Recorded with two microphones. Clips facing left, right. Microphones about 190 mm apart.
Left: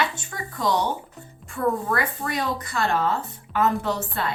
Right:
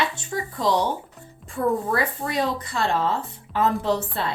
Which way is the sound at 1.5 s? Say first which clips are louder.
Right 1 dB; 30° right (ahead or behind).